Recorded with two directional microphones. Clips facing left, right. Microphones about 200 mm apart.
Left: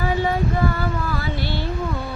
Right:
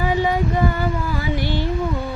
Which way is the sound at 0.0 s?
15° right (ahead or behind).